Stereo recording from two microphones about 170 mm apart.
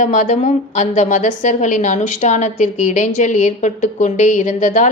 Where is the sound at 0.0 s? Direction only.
45° left (ahead or behind).